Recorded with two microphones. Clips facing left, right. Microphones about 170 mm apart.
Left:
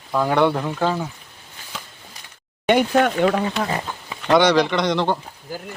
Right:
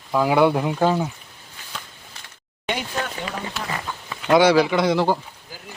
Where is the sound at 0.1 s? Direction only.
5° right (ahead or behind).